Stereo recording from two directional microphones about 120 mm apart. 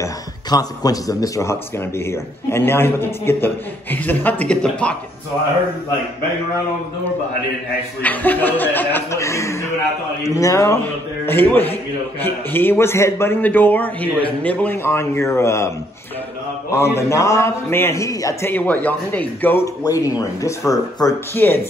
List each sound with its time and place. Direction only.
0.0 s a man's voice: 30° left (ahead or behind); by 4.9 s 10° left (ahead or behind)
8.0 s a man's voice: 15° left (ahead or behind)
16.7 s a man's voice: 20° left (ahead or behind)
19.8 s a man's voice: 30° left (ahead or behind)